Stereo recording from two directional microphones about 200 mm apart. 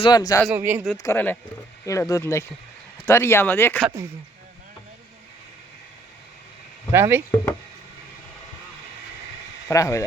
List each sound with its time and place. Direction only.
0.0 s speech: 20° left (ahead or behind)
0.4 s speech: 10° right (ahead or behind)
1.0 s speech: 10° left (ahead or behind)
6.9 s speech: 10° right (ahead or behind)
9.6 s speech: 15° left (ahead or behind)